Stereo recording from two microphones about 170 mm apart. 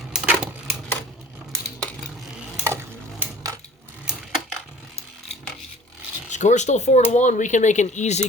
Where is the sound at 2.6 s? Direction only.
15° right (ahead or behind).